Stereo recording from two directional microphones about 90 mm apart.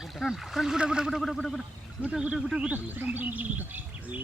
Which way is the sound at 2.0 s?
15° right (ahead or behind).